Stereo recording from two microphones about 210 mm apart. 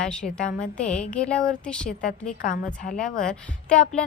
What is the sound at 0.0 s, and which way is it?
A woman's voice, 5° left (ahead or behind).